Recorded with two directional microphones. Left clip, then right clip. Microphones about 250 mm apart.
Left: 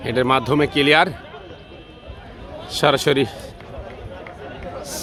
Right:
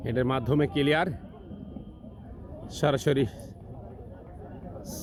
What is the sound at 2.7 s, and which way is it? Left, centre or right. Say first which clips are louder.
Speech: left 9 dB; centre.